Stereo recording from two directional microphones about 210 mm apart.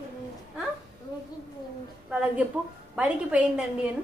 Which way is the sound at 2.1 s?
5° right (ahead or behind).